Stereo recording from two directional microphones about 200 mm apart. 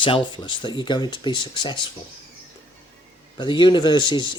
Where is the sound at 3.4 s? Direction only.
25° left (ahead or behind).